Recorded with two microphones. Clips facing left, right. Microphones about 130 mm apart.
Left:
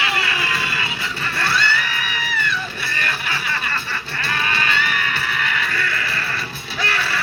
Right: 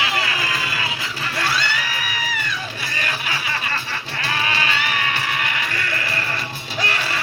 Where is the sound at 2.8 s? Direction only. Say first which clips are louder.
Left 1 dB; 15° right (ahead or behind).